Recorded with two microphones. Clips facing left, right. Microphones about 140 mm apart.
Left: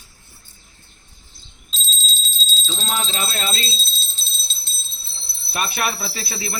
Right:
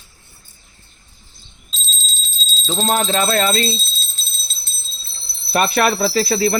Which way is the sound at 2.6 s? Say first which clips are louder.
Right 9 dB; 50° right (ahead or behind).